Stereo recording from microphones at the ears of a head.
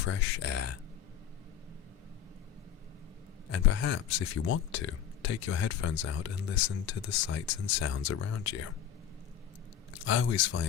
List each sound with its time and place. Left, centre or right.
0.0 s speech: left
3.5 s speech: left
9.9 s speech: left